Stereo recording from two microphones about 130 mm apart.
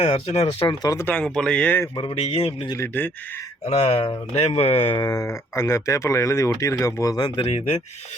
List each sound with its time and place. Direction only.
0.0 s speech: 55° left (ahead or behind)
0.7 s speech: 30° left (ahead or behind)
1.0 s speech: 10° left (ahead or behind)
2.0 s speech: 45° left (ahead or behind)
2.7 s speech: 15° left (ahead or behind)
3.7 s speech: 50° left (ahead or behind)
4.9 s speech: 25° left (ahead or behind)
7.4 s speech: 50° left (ahead or behind)